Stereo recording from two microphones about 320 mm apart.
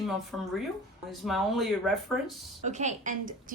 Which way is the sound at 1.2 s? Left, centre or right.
Centre.